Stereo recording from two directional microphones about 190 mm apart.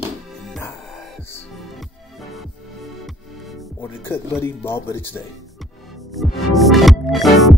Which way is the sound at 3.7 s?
10° left (ahead or behind).